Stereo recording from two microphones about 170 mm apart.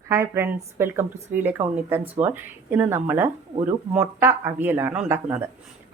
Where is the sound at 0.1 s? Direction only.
15° right (ahead or behind).